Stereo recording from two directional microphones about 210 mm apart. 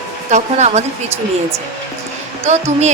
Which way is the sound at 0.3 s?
35° right (ahead or behind).